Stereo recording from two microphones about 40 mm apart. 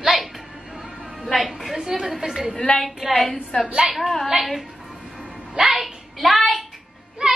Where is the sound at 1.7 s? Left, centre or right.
Centre.